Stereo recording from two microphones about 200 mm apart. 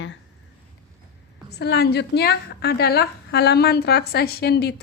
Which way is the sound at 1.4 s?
55° left (ahead or behind).